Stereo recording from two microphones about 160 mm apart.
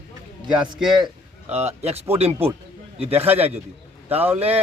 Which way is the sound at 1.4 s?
40° right (ahead or behind).